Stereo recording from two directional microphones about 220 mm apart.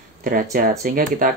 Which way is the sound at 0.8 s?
35° right (ahead or behind).